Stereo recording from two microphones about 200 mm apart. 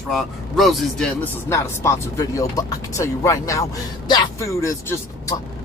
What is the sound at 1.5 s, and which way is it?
Speech, 15° left (ahead or behind).